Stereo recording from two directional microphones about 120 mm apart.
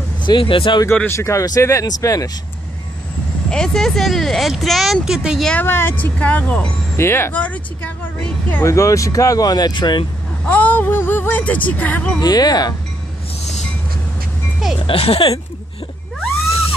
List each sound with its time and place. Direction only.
0.2 s speech: 45° left (ahead or behind)
0.8 s speech: 20° left (ahead or behind)
3.4 s speech: 5° left (ahead or behind)
5.4 s speech: 10° left (ahead or behind)
5.7 s speech: 20° left (ahead or behind)
8.6 s speech: 25° left (ahead or behind); by 10.0 s 40° left (ahead or behind)
10.4 s speech: 15° left (ahead or behind)
12.2 s speech: 35° left (ahead or behind)
14.9 s speech: 50° left (ahead or behind)